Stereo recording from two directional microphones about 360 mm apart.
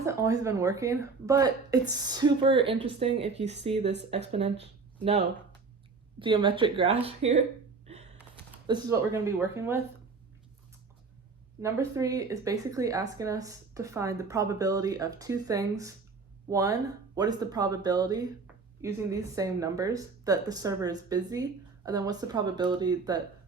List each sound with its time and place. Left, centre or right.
0.0 s speech: centre
8.6 s speech: centre
11.6 s speech: centre